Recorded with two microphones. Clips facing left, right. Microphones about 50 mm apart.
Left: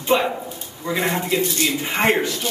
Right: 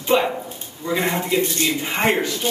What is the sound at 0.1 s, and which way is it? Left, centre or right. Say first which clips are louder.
A woman's voice: right 1 dB; centre.